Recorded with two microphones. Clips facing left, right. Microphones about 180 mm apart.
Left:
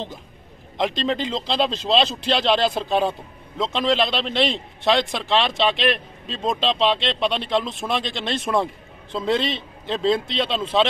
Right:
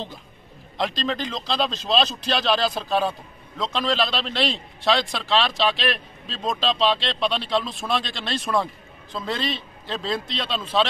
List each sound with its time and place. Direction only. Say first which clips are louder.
0.7 s a man's voice: left 3 dB; 20° left (ahead or behind)